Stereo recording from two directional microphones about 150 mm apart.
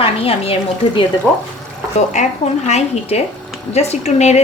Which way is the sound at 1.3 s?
10° left (ahead or behind).